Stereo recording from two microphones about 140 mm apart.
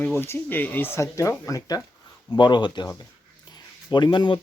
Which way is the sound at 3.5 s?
30° left (ahead or behind).